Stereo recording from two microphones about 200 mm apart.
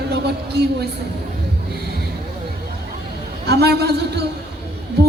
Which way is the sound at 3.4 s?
55° right (ahead or behind).